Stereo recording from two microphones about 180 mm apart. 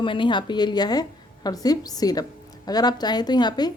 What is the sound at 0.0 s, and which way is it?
Speech, 30° left (ahead or behind).